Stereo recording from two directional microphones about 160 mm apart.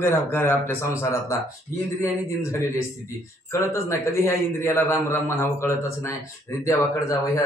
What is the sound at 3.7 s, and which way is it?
A man's voice, 15° left (ahead or behind).